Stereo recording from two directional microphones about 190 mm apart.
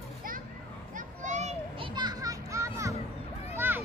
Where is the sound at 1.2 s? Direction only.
35° right (ahead or behind).